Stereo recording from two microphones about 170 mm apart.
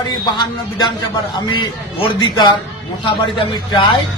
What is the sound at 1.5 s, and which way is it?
Speech, 25° left (ahead or behind).